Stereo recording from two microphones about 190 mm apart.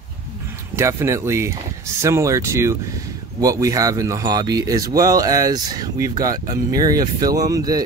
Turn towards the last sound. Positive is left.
turn(degrees=-20)  # may be behind; listen again after turning